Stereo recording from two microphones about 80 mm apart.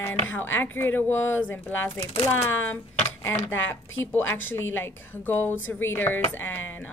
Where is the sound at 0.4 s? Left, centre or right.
Left.